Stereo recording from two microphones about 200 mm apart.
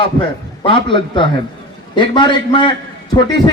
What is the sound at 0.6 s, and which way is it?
A man's voice, 25° left (ahead or behind).